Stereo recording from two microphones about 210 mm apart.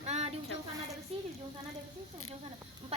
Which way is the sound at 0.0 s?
30° right (ahead or behind).